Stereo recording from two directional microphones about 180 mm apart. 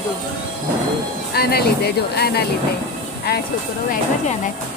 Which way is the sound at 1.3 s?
60° left (ahead or behind).